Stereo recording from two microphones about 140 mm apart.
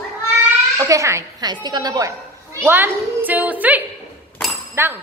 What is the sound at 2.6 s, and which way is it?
A woman's voice, 15° right (ahead or behind).